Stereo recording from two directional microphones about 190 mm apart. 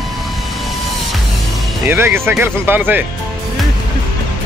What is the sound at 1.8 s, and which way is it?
Speech, 10° right (ahead or behind).